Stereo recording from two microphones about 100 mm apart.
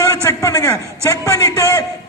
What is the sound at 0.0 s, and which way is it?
A man's voice, 30° left (ahead or behind).